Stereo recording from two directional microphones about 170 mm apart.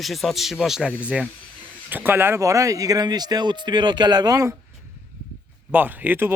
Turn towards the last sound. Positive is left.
turn(degrees=-10)  # may be behind; listen again after turning